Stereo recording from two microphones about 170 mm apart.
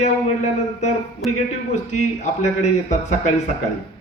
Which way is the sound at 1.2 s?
Centre (ahead or behind).